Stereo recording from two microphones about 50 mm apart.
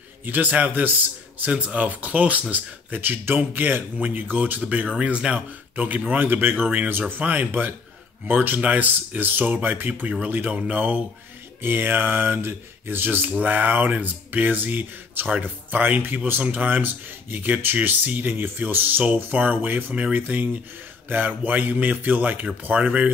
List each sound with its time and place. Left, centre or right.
0.2 s speech: right
6.2 s speech: right
6.5 s speech: right
6.9 s speech: right
11.6 s speech: right
22.8 s speech: right